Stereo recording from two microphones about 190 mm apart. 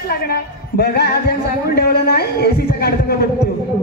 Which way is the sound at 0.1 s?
55° left (ahead or behind).